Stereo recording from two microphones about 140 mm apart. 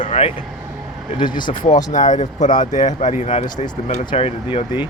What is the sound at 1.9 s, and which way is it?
Speech, 65° left (ahead or behind).